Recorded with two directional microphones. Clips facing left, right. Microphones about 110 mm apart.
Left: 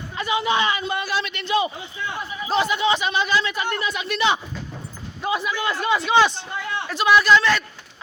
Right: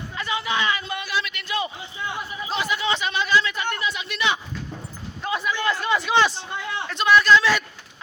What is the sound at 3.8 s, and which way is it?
Speech, 45° left (ahead or behind).